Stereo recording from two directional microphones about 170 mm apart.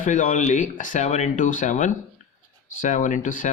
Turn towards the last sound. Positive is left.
turn(degrees=50)  # may be behind; listen again after turning